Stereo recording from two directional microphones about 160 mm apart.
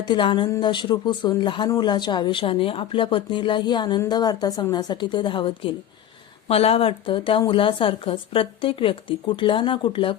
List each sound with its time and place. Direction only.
0.0 s a woman's voice: 30° left (ahead or behind)